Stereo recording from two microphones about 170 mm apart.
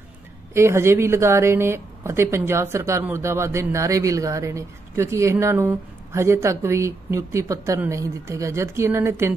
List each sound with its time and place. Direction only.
0.6 s speech: 15° right (ahead or behind)